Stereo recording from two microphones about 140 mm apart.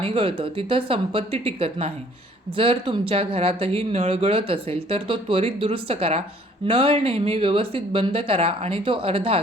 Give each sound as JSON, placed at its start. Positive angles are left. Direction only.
{"t": 0.0, "sound": "speech", "side_deg": -40}